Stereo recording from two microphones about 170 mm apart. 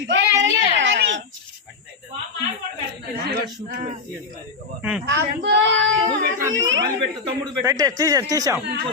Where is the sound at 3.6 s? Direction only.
45° right (ahead or behind).